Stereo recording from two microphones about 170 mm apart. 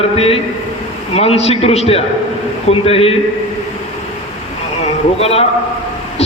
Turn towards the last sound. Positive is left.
turn(degrees=35)  # may be behind; listen again after turning